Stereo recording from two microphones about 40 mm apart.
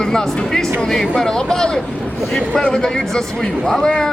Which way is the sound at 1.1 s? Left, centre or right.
Centre.